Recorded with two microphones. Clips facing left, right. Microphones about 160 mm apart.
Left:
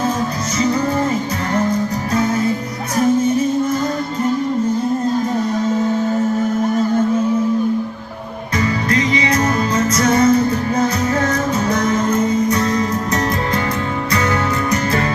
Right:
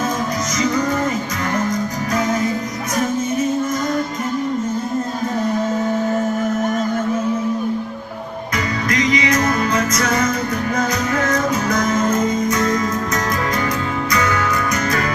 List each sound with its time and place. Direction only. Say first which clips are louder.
0.6 s music: left 2 dB; 30° left (ahead or behind)
2.1 s music: left 2 dB; 30° left (ahead or behind)
8.5 s music: left 3 dB; 30° left (ahead or behind)